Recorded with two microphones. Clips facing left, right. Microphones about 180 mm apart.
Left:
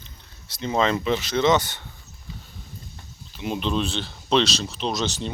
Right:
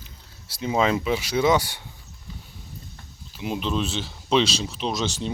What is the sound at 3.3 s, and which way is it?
Speech, 5° right (ahead or behind).